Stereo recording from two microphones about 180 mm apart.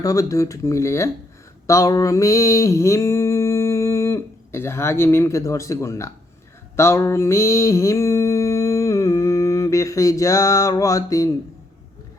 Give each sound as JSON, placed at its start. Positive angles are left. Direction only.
{"t": 0.0, "sound": "speech", "side_deg": 20}
{"t": 1.6, "sound": "a sound", "side_deg": 20}
{"t": 6.7, "sound": "mantra", "side_deg": 15}